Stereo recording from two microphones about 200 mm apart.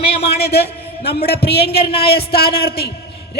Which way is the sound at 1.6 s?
30° left (ahead or behind).